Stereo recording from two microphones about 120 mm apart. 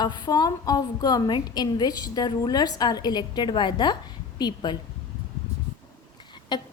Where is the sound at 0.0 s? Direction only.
35° left (ahead or behind).